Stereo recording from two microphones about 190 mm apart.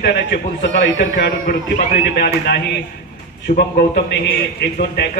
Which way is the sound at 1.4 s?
50° left (ahead or behind).